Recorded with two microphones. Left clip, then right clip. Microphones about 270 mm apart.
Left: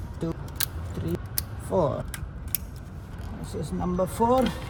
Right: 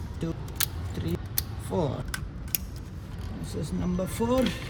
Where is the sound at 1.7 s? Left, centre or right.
Centre.